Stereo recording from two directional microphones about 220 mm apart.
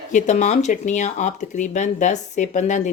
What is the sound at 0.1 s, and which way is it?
Speech, 35° left (ahead or behind).